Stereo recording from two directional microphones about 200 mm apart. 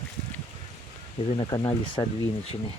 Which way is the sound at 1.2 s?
25° left (ahead or behind).